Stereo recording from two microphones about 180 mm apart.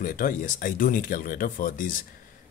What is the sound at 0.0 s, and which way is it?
Speech, 50° left (ahead or behind).